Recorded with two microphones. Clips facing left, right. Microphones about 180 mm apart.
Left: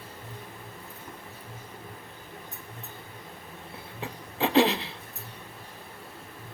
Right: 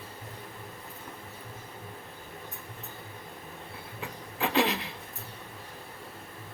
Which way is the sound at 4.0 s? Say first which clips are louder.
Left 4 dB; 30° left (ahead or behind).